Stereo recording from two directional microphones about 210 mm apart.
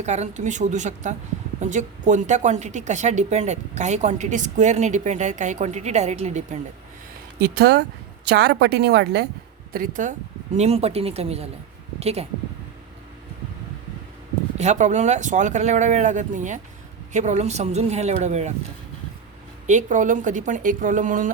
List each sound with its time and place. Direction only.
0.0 s a woman's voice: 35° right (ahead or behind)
7.3 s a woman's voice: 50° right (ahead or behind)
9.7 s speech: 40° right (ahead or behind)
14.6 s a woman's voice: 35° right (ahead or behind)
19.6 s a woman's voice: 35° right (ahead or behind)